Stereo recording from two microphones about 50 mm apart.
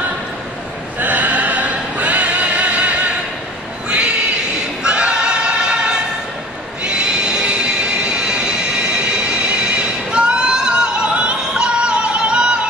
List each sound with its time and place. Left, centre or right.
0.9 s music: right
4.8 s choir: centre
6.8 s train: centre